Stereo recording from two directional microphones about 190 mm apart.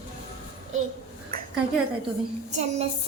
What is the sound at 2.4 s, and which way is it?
Child singing, 35° right (ahead or behind).